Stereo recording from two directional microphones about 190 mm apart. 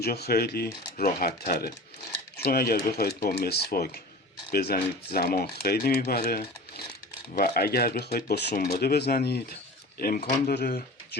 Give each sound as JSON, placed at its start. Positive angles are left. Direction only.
{"t": 0.0, "sound": "speech", "side_deg": 55}